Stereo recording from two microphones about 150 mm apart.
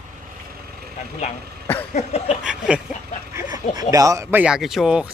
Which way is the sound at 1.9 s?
50° left (ahead or behind).